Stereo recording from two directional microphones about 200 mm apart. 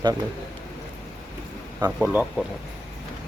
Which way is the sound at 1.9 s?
5° right (ahead or behind).